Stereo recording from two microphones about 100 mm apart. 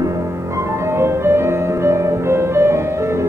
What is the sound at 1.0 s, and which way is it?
Music, 25° right (ahead or behind).